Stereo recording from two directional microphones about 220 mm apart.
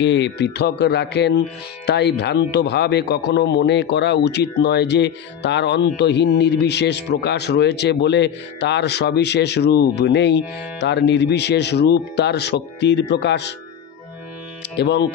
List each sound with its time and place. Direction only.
0.0 s a man's voice: 55° left (ahead or behind)
14.8 s a man's voice: 50° left (ahead or behind)